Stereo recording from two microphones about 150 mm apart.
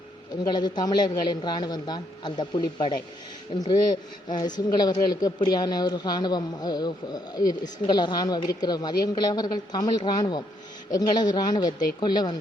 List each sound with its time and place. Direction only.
0.4 s speech: 30° left (ahead or behind)